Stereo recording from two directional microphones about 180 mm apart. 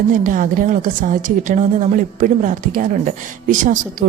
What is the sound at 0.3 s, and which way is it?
Speech, 45° right (ahead or behind).